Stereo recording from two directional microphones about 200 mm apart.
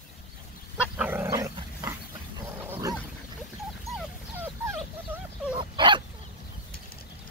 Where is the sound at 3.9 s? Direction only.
10° right (ahead or behind).